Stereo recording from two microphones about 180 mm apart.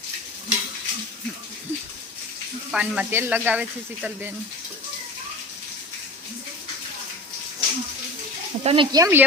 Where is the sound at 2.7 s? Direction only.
5° right (ahead or behind).